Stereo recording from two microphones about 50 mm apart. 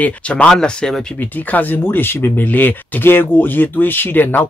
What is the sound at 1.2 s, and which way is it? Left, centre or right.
Speech, left.